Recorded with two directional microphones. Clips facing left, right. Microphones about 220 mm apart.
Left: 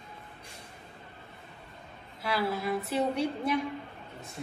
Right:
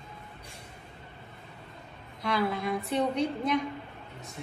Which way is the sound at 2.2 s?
5° left (ahead or behind).